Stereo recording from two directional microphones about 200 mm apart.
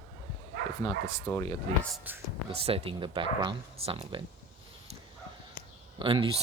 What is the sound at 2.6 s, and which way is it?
Speech, 25° right (ahead or behind).